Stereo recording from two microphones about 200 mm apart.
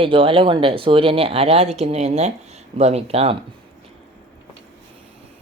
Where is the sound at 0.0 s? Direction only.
25° right (ahead or behind).